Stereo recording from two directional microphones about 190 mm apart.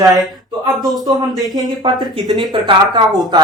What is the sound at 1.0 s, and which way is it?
Speech, 20° right (ahead or behind).